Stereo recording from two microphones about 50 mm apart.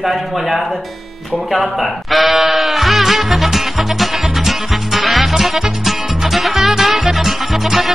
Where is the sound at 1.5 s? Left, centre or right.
Centre.